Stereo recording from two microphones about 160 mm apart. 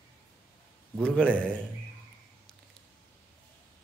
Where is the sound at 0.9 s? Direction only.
5° left (ahead or behind).